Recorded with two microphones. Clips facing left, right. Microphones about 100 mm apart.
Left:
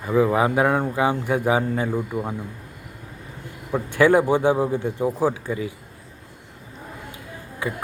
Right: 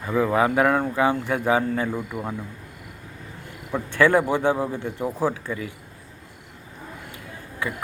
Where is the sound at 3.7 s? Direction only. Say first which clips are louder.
Left 2 dB; 15° left (ahead or behind).